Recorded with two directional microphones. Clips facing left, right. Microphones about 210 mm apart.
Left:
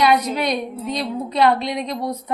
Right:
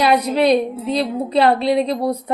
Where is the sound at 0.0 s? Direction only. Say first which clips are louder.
Right 3 dB; 35° right (ahead or behind).